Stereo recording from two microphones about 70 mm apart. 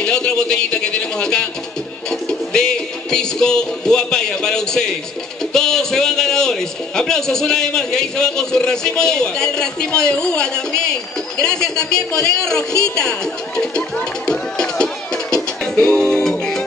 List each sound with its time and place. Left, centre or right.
0.0 s a man's voice: centre
15.7 s music: centre